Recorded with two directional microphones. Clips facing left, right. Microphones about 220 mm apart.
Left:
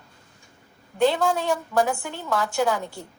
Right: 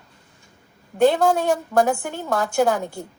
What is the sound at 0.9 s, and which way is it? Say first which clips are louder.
A woman's voice: right 4 dB; 45° right (ahead or behind).